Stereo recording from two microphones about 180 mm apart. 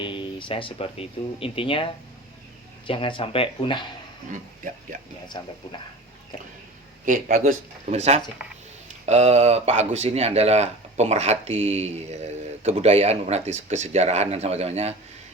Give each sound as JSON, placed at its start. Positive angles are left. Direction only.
{"t": 0.0, "sound": "speech", "side_deg": 25}
{"t": 4.9, "sound": "speech", "side_deg": -50}
{"t": 5.3, "sound": "speech", "side_deg": 25}
{"t": 7.0, "sound": "speech", "side_deg": -45}